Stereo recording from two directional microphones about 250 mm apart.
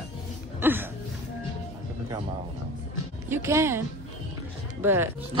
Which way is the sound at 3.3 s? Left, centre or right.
Centre.